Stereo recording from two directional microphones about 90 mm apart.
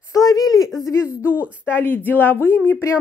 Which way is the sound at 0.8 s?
30° left (ahead or behind).